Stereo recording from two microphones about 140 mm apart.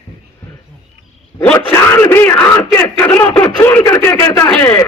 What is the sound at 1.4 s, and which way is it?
Speech, 15° left (ahead or behind).